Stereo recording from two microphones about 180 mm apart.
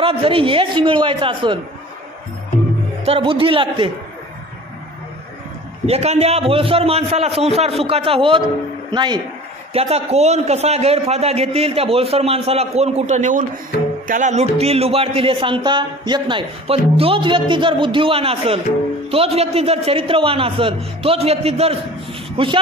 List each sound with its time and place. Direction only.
0.0 s a man's voice: 30° right (ahead or behind)
3.1 s a man's voice: 30° right (ahead or behind)
5.9 s a man's voice: 35° right (ahead or behind)
9.8 s speech: 35° right (ahead or behind)